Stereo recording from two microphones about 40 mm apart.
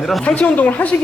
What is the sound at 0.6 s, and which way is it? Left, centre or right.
Speech, left.